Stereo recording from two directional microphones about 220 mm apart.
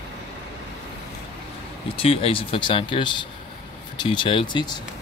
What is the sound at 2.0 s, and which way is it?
Speech, 25° left (ahead or behind).